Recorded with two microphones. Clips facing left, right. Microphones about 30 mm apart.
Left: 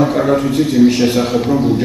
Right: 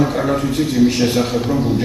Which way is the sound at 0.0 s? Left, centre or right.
Centre.